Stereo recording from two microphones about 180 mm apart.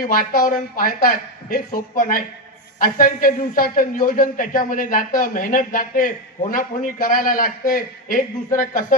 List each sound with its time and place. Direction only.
0.0 s a man's voice: 50° left (ahead or behind)